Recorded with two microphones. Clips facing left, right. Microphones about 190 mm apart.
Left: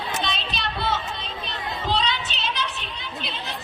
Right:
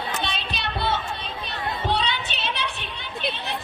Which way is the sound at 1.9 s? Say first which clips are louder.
Left 2 dB; 60° right (ahead or behind).